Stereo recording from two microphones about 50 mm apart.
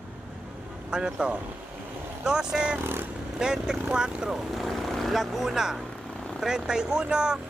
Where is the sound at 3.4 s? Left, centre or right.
Centre.